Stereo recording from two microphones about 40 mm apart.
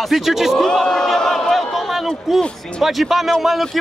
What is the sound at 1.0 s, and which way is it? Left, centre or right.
A man's voice, centre.